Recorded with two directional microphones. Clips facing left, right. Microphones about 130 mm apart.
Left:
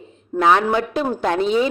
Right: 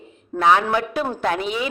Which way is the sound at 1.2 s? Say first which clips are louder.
Left 7 dB; 30° left (ahead or behind).